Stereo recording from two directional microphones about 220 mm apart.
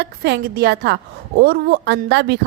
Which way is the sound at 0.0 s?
50° right (ahead or behind).